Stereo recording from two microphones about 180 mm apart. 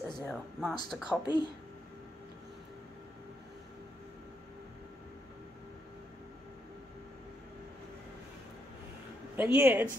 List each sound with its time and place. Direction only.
0.2 s speech: 5° left (ahead or behind)
1.2 s speech: 25° left (ahead or behind)
9.4 s speech: 10° right (ahead or behind)